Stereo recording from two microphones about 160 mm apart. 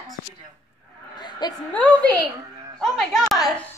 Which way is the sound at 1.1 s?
30° left (ahead or behind).